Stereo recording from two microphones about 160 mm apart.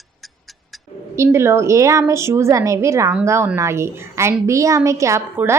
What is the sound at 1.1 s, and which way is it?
A woman's voice, 15° right (ahead or behind).